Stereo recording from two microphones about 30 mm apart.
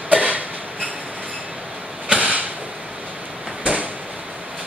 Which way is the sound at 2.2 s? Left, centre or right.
Right.